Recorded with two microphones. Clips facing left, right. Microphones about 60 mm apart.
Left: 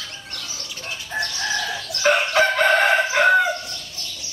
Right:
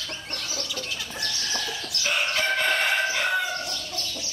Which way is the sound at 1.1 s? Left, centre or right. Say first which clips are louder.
Left 9 dB; left.